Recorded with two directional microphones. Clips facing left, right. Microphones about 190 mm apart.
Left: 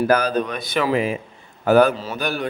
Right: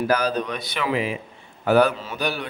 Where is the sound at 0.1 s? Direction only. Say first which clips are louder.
Left 3 dB; 55° left (ahead or behind).